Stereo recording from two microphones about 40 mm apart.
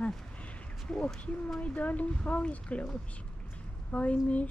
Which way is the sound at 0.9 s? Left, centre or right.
Left.